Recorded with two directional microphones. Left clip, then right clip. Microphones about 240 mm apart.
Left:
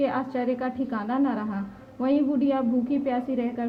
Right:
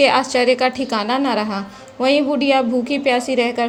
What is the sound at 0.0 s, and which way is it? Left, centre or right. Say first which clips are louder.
A woman's voice: right 12 dB; right.